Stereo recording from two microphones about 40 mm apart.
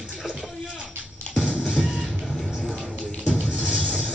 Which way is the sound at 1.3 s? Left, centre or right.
Left.